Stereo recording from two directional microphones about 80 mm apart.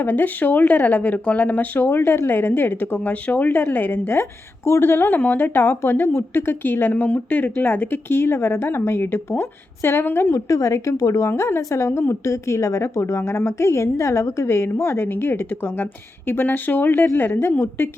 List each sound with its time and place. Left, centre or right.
0.0 s speech: left
4.2 s speech: left
10.3 s a woman's voice: left